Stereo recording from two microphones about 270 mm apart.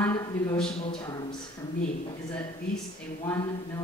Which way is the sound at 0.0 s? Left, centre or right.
Centre.